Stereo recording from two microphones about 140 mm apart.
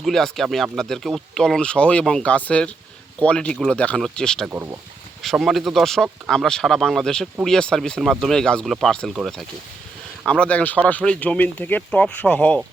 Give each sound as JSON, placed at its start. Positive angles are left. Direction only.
{"t": 0.0, "sound": "speech", "side_deg": 0}
{"t": 4.4, "sound": "speech", "side_deg": -15}
{"t": 5.2, "sound": "speech", "side_deg": 0}